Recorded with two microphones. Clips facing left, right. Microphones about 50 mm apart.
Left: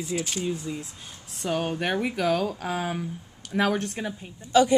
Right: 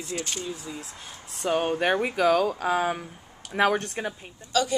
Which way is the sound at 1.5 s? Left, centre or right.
Right.